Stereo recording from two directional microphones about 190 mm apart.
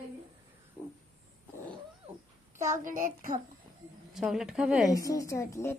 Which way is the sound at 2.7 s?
45° right (ahead or behind).